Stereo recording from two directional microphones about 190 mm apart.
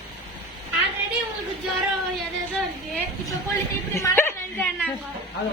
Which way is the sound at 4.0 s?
10° left (ahead or behind).